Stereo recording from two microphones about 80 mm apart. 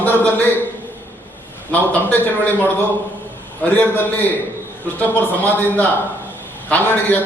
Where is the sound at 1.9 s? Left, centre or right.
Left.